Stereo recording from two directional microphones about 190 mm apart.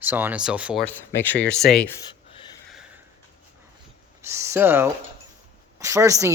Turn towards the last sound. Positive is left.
turn(degrees=-15)  # may be behind; listen again after turning